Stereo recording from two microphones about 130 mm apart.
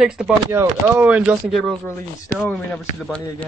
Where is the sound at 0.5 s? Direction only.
20° right (ahead or behind).